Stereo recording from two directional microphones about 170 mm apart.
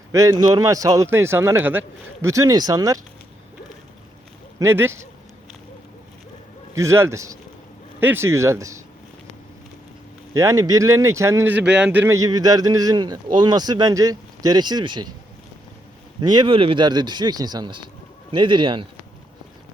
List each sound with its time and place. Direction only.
0.1 s a man's voice: 20° right (ahead or behind)
4.6 s a man's voice: 15° right (ahead or behind)
6.7 s a man's voice: 15° right (ahead or behind)
10.3 s speech: 20° right (ahead or behind)
16.2 s speech: 25° right (ahead or behind)